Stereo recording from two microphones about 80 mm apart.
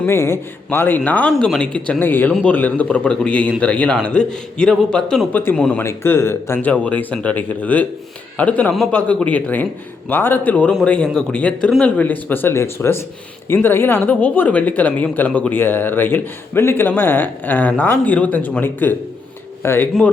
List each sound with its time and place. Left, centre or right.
0.0 s speech: left
1.3 s a man's voice: centre
5.3 s speech: left
5.5 s a man's voice: centre
5.8 s speech: left
6.6 s a man's voice: centre